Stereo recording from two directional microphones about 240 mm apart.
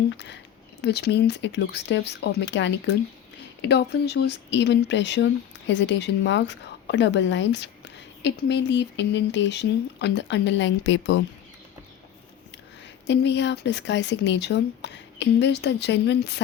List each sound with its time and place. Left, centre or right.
0.8 s speech: left
13.1 s speech: left